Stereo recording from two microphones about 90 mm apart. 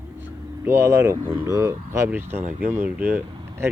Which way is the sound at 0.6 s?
25° right (ahead or behind).